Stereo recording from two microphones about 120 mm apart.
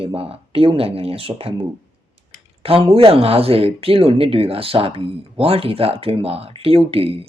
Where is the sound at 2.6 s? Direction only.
55° right (ahead or behind).